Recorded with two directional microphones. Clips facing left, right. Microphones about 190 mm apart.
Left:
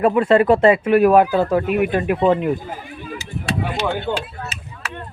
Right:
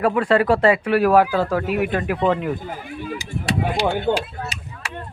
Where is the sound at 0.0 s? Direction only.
25° left (ahead or behind).